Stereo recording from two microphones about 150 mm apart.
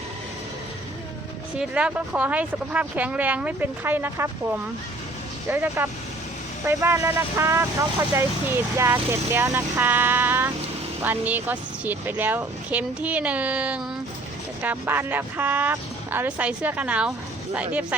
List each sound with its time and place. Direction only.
1.5 s speech: 10° right (ahead or behind)